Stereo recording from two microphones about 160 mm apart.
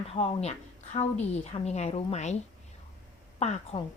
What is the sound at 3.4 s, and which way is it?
Speech, 45° left (ahead or behind).